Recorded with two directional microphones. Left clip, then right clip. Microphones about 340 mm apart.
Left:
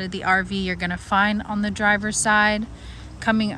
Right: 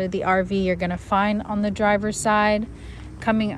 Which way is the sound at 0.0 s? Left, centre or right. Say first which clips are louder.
Even; centre.